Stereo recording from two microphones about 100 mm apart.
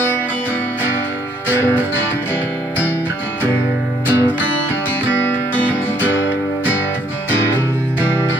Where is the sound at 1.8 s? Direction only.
20° left (ahead or behind).